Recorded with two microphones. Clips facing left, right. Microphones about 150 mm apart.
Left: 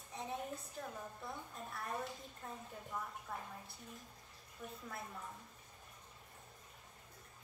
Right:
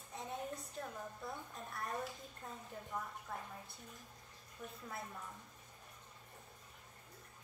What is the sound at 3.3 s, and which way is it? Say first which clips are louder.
Speech: even; centre (ahead or behind).